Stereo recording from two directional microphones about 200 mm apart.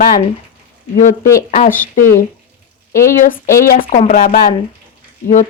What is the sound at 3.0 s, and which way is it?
Speech, 45° left (ahead or behind).